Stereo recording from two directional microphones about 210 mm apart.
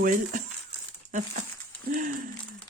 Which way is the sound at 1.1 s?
35° right (ahead or behind).